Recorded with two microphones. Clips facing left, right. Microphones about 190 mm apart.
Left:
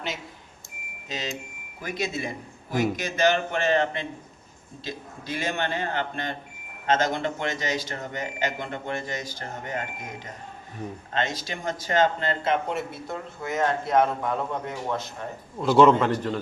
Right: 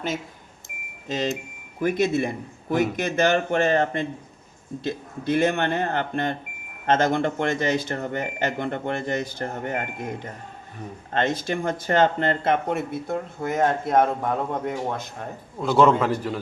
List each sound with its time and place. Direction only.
1.0 s speech: 50° right (ahead or behind)
15.6 s a man's voice: centre (ahead or behind)